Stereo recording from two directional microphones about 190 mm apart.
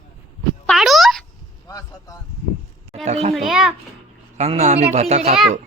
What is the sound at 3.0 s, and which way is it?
Speech, 35° right (ahead or behind).